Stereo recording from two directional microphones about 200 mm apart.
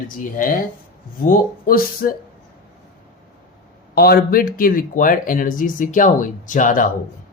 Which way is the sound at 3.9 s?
50° left (ahead or behind).